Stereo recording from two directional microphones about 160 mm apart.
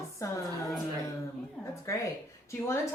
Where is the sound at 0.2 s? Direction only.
20° left (ahead or behind).